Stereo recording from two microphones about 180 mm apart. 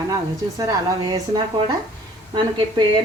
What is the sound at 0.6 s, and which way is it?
Speech, 20° right (ahead or behind).